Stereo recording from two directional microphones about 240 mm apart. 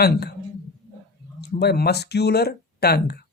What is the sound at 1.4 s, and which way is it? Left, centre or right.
Speech, left.